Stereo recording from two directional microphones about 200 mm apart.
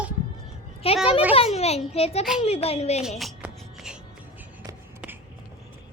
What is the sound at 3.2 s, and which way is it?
Music, 5° right (ahead or behind).